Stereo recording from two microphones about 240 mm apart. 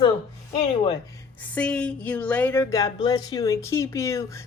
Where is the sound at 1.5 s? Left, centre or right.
Centre.